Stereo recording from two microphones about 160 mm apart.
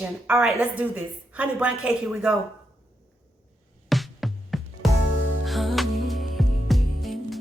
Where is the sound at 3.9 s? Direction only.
Centre (ahead or behind).